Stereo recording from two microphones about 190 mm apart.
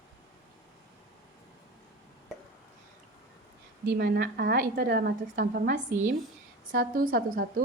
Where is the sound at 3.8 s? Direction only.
50° right (ahead or behind).